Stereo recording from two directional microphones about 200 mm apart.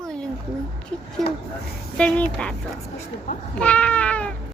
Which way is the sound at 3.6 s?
5° left (ahead or behind).